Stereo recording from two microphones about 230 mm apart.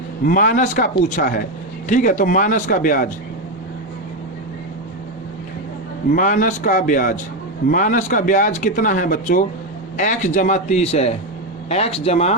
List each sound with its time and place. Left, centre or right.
0.3 s speech: left
6.1 s speech: left